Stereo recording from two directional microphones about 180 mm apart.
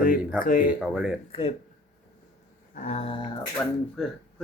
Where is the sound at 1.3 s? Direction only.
35° left (ahead or behind).